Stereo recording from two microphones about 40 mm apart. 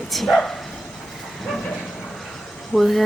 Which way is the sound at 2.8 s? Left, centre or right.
Centre.